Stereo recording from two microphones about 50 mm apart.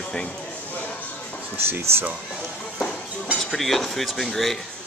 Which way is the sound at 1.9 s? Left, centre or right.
Right.